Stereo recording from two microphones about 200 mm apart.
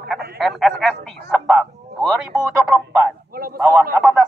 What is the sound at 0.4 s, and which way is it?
Speech, centre (ahead or behind).